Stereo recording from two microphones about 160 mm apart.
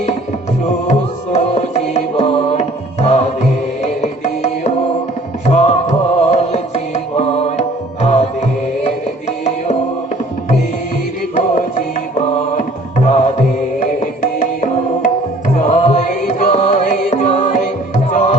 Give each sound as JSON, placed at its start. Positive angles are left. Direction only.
{"t": 0.9, "sound": "music", "side_deg": 45}
{"t": 13.1, "sound": "music", "side_deg": 45}
{"t": 15.5, "sound": "music", "side_deg": 50}